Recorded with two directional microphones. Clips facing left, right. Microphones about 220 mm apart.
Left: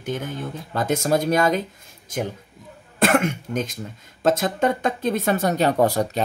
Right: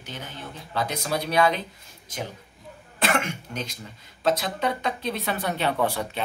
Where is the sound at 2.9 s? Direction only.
50° left (ahead or behind).